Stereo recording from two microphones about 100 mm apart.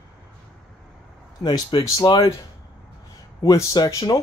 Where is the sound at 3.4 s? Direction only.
40° left (ahead or behind).